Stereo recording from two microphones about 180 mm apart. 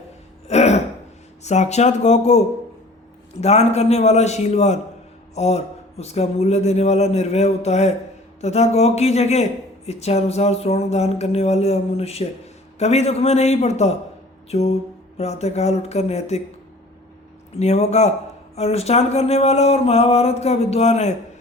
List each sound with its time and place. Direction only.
0.4 s throat clearing: 35° left (ahead or behind)
1.5 s speech: 40° left (ahead or behind)
3.4 s speech: 35° left (ahead or behind)
17.5 s speech: 35° left (ahead or behind)